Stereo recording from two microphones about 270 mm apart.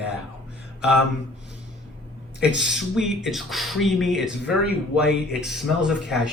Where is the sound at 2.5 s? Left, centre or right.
Left.